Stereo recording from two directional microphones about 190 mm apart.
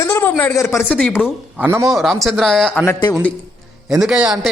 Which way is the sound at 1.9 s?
Centre (ahead or behind).